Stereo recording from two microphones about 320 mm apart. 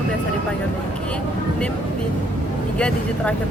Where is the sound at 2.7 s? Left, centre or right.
Centre.